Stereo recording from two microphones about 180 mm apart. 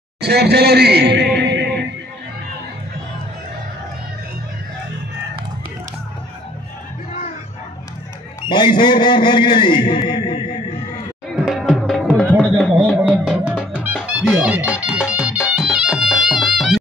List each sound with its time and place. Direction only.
0.2 s a man's voice: 65° right (ahead or behind)
8.5 s a man's voice: 25° left (ahead or behind)
11.2 s music: centre (ahead or behind)